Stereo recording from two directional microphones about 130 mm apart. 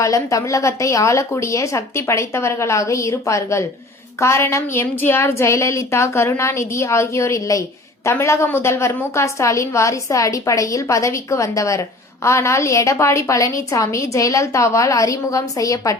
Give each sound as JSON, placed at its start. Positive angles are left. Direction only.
{"t": 0.0, "sound": "a woman's voice", "side_deg": 25}